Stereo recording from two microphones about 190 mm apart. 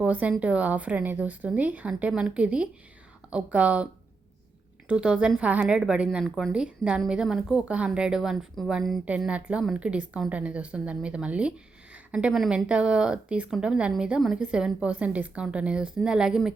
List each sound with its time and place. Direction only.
0.0 s speech: 5° right (ahead or behind)
4.9 s a woman's voice: 5° right (ahead or behind)